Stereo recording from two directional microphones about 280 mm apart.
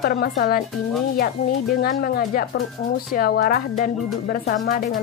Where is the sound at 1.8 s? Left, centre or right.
Left.